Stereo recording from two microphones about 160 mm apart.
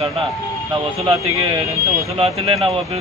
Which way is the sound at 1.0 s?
35° right (ahead or behind).